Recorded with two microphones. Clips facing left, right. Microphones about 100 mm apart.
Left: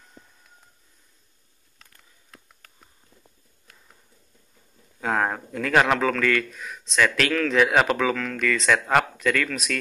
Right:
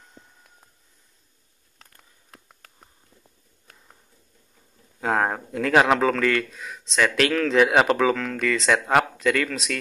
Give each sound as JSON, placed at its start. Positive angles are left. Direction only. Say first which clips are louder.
{"t": 5.0, "sound": "speech", "louder": "right 1 dB", "side_deg": -20}